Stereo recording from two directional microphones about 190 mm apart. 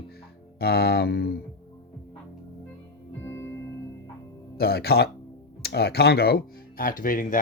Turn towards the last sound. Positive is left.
turn(degrees=45)  # may be behind; listen again after turning